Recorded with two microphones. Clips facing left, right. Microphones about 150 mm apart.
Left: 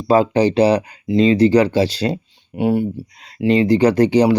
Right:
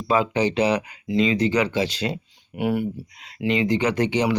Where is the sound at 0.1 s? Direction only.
35° left (ahead or behind).